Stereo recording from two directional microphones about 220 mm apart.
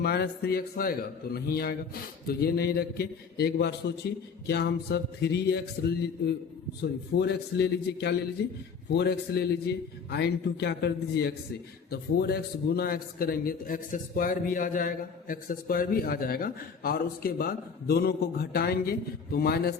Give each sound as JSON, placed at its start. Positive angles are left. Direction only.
{"t": 0.0, "sound": "a man's voice", "side_deg": 45}
{"t": 7.2, "sound": "a man's voice", "side_deg": 50}